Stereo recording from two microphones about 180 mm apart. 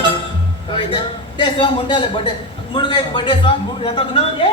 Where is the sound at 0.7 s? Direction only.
25° left (ahead or behind).